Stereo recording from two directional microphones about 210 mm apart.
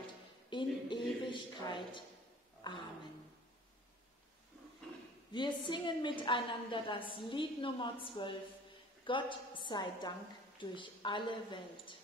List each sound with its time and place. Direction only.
0.0 s music: 20° left (ahead or behind)
2.6 s a sound: 25° left (ahead or behind)
5.3 s a woman's voice: 20° left (ahead or behind)